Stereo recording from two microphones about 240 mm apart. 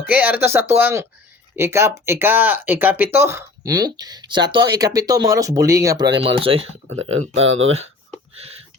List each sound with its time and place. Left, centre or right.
0.1 s speech: centre; by 6.7 s right
6.8 s speech: right